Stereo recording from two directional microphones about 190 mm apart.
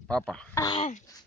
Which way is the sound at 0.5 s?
20° left (ahead or behind).